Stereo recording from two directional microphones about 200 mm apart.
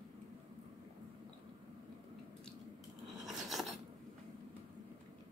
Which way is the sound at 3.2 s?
Centre (ahead or behind).